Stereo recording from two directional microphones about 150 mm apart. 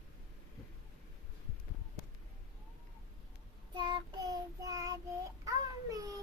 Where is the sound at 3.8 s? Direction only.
25° right (ahead or behind).